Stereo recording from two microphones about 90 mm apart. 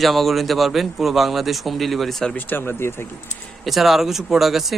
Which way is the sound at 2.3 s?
20° left (ahead or behind).